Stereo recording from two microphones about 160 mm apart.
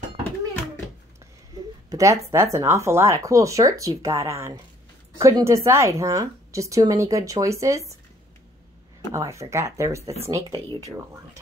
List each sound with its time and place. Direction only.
1.9 s a woman's voice: 20° right (ahead or behind)
9.1 s a woman's voice: 20° right (ahead or behind)